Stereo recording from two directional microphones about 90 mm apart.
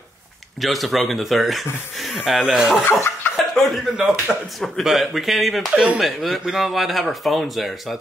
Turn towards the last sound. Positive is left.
turn(degrees=0)  # may be behind; listen again after turning